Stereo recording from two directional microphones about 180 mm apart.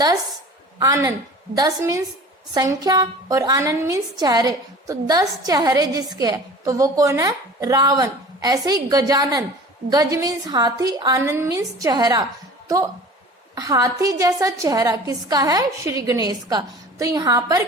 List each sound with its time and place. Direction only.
0.8 s a woman's voice: 20° right (ahead or behind)